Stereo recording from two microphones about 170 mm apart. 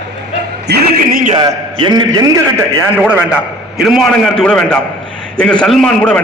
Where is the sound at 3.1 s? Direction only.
10° right (ahead or behind).